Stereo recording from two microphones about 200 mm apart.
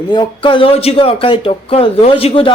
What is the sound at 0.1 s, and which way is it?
Speech, 25° left (ahead or behind).